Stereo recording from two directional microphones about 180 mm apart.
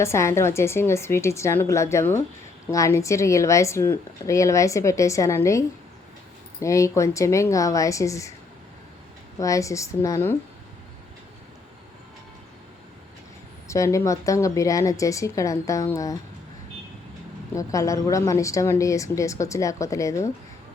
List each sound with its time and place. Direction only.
0.0 s speech: 15° left (ahead or behind)
9.4 s speech: 20° left (ahead or behind)
13.7 s speech: 15° left (ahead or behind)
17.5 s speech: 20° left (ahead or behind)